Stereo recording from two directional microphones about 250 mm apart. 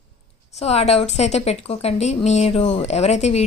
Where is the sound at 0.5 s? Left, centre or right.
Left.